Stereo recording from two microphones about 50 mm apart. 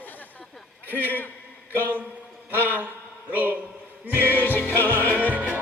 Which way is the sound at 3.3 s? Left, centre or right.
Right.